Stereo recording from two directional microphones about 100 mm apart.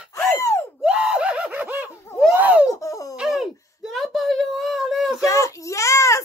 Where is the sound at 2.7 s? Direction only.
30° left (ahead or behind).